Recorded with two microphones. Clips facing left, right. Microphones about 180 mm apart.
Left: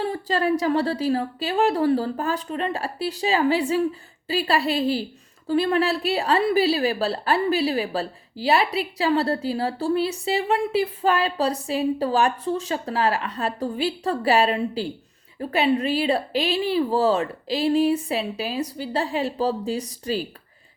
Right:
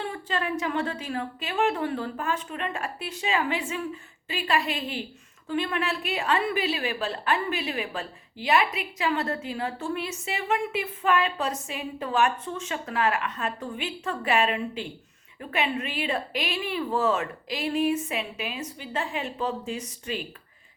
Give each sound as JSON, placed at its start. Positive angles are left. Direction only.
{"t": 0.0, "sound": "a woman's voice", "side_deg": 35}